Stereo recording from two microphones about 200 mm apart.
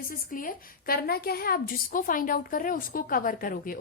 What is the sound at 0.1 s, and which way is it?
A woman's voice, 45° left (ahead or behind).